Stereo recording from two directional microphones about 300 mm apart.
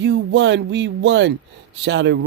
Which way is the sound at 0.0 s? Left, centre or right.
Right.